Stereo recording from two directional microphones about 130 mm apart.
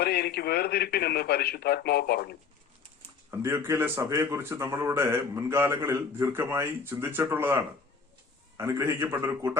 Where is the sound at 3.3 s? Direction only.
20° right (ahead or behind).